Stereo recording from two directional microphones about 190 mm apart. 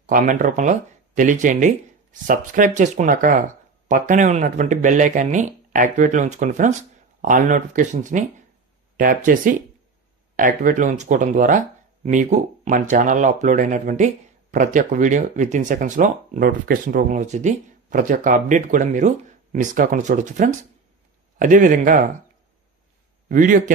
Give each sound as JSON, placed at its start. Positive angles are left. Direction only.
{"t": 0.0, "sound": "speech", "side_deg": -45}
{"t": 23.2, "sound": "speech", "side_deg": -45}